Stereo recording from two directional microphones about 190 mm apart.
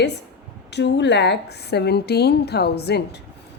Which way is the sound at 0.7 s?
65° left (ahead or behind).